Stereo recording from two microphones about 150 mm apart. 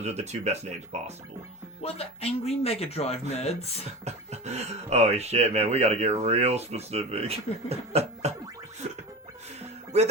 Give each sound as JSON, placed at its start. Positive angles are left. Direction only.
{"t": 0.0, "sound": "speech", "side_deg": -45}
{"t": 1.8, "sound": "speech", "side_deg": 45}
{"t": 4.0, "sound": "speech", "side_deg": -45}